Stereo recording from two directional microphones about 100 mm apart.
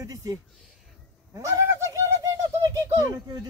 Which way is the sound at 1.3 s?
30° right (ahead or behind).